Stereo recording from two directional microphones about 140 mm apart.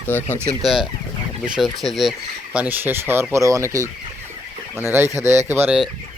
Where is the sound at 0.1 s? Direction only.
15° left (ahead or behind).